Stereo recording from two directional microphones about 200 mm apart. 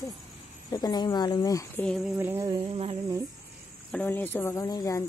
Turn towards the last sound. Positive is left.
turn(degrees=15)  # may be behind; listen again after turning